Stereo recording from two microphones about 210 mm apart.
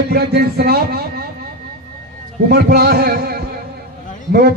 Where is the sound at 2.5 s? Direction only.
50° right (ahead or behind).